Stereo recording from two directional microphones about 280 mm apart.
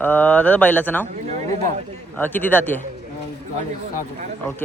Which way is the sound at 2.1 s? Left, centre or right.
Centre.